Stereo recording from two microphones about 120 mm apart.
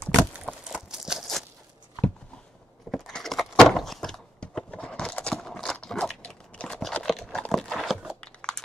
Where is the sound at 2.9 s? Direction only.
5° left (ahead or behind).